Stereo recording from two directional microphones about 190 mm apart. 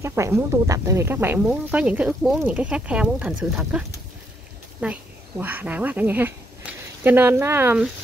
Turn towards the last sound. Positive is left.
turn(degrees=-10)  # may be behind; listen again after turning